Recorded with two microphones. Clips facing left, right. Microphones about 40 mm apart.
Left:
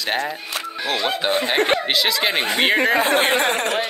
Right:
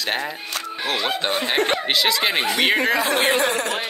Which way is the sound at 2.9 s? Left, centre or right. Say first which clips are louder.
Left 2 dB; left.